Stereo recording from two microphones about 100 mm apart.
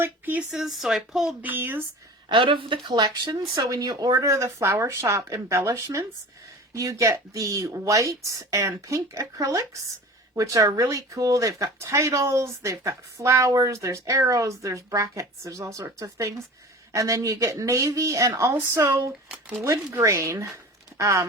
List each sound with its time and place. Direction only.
0.0 s speech: 15° right (ahead or behind)
0.5 s a woman's voice: 5° right (ahead or behind)
1.4 s speech: 20° right (ahead or behind)
2.3 s speech: 55° right (ahead or behind); by 21.2 s 30° right (ahead or behind)